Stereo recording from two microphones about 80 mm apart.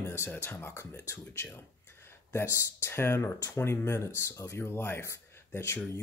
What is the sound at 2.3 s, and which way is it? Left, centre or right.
Speech, left.